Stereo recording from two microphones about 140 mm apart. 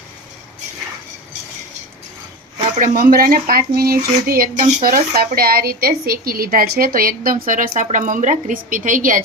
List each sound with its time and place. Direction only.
2.7 s a woman's voice: 70° right (ahead or behind)